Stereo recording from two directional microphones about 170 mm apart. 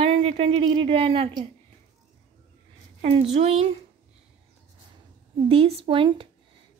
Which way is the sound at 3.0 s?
35° right (ahead or behind).